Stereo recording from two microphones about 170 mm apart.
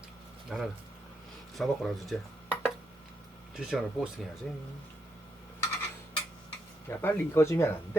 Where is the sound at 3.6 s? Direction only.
5° right (ahead or behind).